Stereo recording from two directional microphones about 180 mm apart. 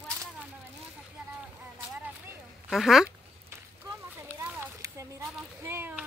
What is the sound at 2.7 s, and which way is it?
Speech, centre (ahead or behind).